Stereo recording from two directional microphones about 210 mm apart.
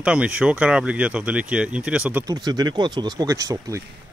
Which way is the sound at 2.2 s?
20° right (ahead or behind).